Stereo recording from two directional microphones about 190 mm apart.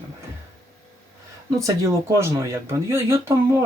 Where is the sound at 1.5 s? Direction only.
15° right (ahead or behind).